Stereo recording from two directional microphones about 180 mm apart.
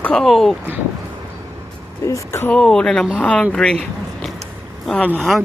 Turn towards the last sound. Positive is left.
turn(degrees=0)  # may be behind; listen again after turning